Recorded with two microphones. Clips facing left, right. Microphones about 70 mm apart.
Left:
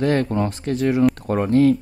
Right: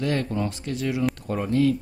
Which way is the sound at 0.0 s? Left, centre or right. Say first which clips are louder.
Left 6 dB; left.